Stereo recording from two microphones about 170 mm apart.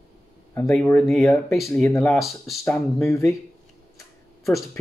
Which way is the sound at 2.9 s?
15° left (ahead or behind).